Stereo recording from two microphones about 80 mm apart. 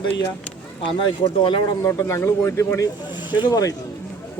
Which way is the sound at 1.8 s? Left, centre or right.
Left.